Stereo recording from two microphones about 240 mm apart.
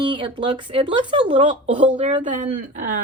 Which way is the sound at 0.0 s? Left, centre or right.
Right.